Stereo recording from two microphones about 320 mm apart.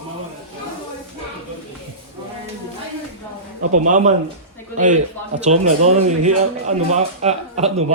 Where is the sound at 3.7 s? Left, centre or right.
Right.